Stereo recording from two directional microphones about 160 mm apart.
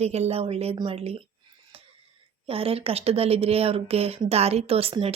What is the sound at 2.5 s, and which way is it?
Speech, 35° right (ahead or behind).